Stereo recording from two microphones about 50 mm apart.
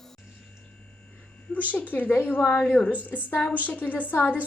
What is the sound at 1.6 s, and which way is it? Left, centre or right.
A woman's voice, left.